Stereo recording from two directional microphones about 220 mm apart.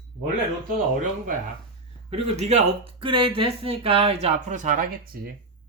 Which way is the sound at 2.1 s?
30° right (ahead or behind).